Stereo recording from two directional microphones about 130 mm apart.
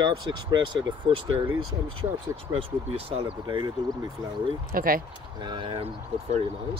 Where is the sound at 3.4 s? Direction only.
40° right (ahead or behind).